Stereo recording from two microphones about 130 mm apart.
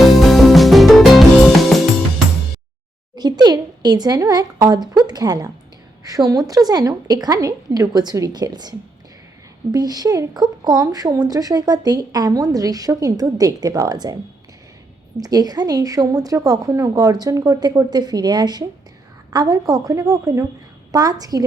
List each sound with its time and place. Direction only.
0.0 s music: centre (ahead or behind)
3.2 s a woman's voice: 30° right (ahead or behind)
9.7 s speech: 30° right (ahead or behind)
15.2 s speech: 30° right (ahead or behind)